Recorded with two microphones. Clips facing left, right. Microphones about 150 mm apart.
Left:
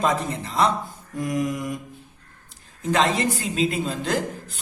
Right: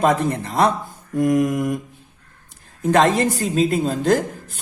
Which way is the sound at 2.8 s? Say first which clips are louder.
Right 5 dB; 50° right (ahead or behind).